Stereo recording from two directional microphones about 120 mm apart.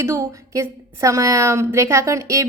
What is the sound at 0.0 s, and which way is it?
A woman's voice, 25° right (ahead or behind).